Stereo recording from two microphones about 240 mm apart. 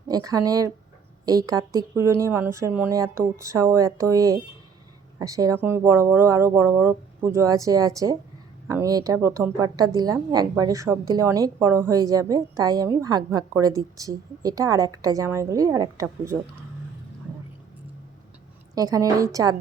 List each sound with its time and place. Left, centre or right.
0.3 s a woman's voice: centre
18.7 s a woman's voice: centre